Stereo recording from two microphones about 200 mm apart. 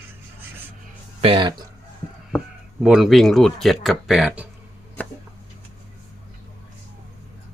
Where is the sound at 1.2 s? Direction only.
25° right (ahead or behind).